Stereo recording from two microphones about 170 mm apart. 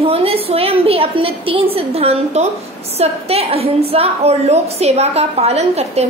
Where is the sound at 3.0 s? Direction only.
35° right (ahead or behind).